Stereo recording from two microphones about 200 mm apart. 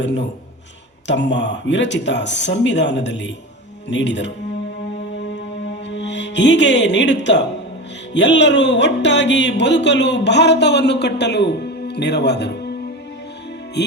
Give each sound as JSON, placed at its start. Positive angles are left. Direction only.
{"t": 0.0, "sound": "speech", "side_deg": 65}
{"t": 5.9, "sound": "speech", "side_deg": 60}
{"t": 13.8, "sound": "speech", "side_deg": 60}